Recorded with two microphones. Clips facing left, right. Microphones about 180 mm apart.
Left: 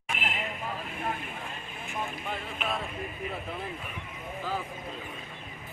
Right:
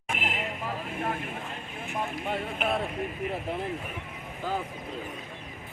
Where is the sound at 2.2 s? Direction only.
60° right (ahead or behind).